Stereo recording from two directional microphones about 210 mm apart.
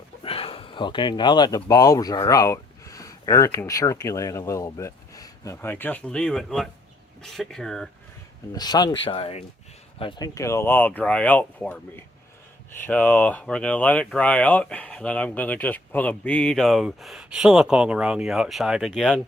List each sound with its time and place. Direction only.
0.2 s speech: 25° left (ahead or behind); by 7.9 s centre (ahead or behind)
8.5 s speech: 20° left (ahead or behind); by 19.2 s centre (ahead or behind)